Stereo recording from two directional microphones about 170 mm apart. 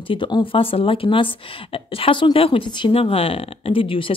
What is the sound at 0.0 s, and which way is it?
Speech, 30° left (ahead or behind).